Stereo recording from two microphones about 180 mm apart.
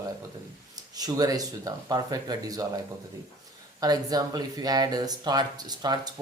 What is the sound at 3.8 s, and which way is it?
Speech, 20° right (ahead or behind).